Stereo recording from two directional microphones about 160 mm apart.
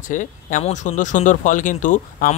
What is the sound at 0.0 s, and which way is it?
Speech, 50° left (ahead or behind).